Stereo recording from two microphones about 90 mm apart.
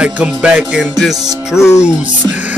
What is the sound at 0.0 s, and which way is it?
A man's voice, 15° right (ahead or behind).